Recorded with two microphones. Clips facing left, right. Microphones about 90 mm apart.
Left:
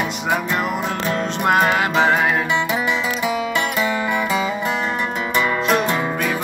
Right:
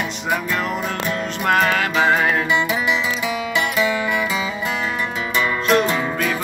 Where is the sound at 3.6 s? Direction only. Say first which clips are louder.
Right 1 dB; 35° left (ahead or behind).